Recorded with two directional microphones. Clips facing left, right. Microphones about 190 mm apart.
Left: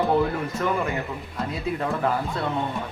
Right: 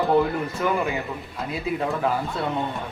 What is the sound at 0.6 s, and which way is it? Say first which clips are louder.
Speech: right 1 dB; 10° right (ahead or behind).